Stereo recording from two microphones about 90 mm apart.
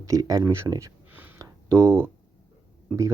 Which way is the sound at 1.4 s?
40° right (ahead or behind).